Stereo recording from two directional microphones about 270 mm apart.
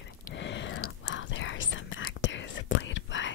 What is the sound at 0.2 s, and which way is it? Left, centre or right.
Whispering, left.